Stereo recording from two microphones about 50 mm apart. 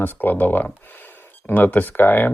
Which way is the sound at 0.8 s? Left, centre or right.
Left.